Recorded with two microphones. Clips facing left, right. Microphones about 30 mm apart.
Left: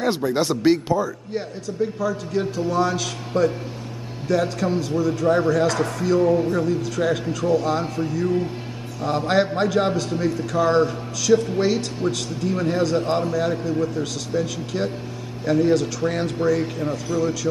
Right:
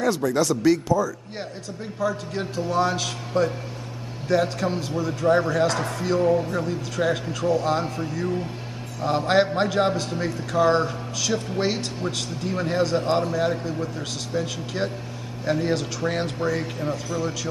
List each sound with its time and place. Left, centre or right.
0.0 s speech: left
1.3 s a man's voice: centre
11.6 s a man's voice: centre